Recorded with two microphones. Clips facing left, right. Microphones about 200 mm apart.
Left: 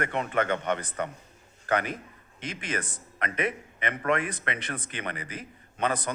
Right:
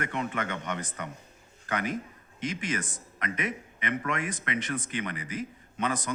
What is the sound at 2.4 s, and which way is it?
Speech, 60° left (ahead or behind).